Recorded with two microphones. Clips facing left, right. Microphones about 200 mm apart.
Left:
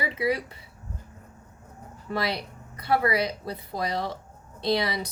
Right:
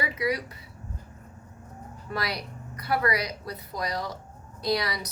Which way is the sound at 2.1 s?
25° left (ahead or behind).